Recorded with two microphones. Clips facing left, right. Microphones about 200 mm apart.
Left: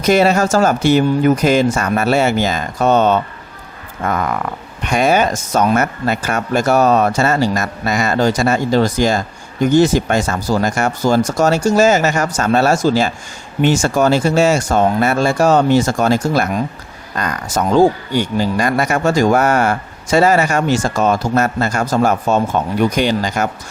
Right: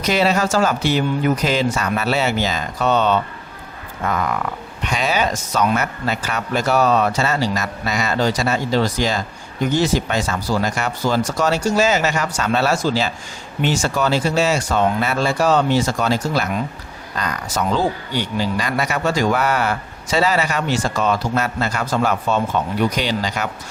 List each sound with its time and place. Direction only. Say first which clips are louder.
0.0 s speech: left 5 dB; 50° left (ahead or behind)